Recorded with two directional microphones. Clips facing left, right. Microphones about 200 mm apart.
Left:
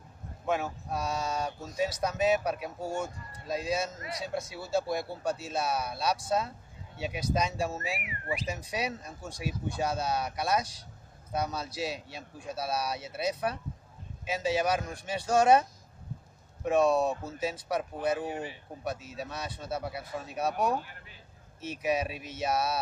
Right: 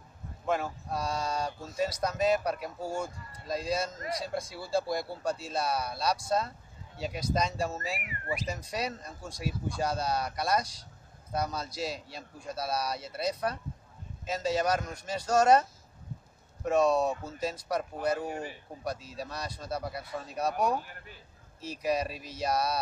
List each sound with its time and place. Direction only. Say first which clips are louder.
0.5 s speech: even; 5° left (ahead or behind)
16.6 s speech: even; 5° left (ahead or behind)
18.3 s speech: left 1 dB; 45° right (ahead or behind)
18.9 s speech: even; 5° left (ahead or behind)
21.8 s speech: even; 5° left (ahead or behind)